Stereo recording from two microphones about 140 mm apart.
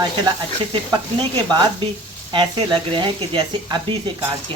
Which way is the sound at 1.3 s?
35° right (ahead or behind).